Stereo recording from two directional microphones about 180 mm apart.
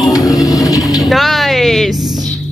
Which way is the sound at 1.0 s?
Centre (ahead or behind).